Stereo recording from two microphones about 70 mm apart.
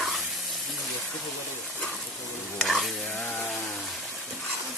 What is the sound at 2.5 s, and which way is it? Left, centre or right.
Stir, centre.